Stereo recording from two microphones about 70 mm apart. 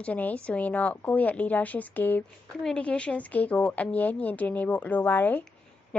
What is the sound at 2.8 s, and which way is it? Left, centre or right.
A woman's voice, centre.